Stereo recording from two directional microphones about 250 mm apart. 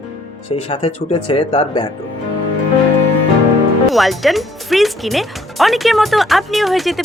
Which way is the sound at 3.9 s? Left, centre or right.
Centre.